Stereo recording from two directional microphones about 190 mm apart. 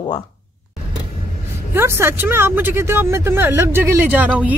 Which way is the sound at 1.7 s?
15° right (ahead or behind).